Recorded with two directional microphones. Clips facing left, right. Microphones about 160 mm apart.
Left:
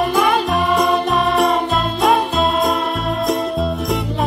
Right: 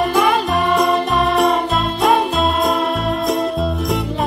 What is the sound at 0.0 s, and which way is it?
Music, centre (ahead or behind).